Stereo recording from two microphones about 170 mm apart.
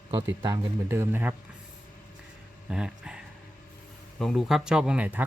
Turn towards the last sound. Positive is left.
turn(degrees=-10)  # may be behind; listen again after turning